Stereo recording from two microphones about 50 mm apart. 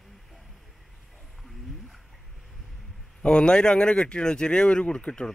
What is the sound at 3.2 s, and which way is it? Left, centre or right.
Speech, centre.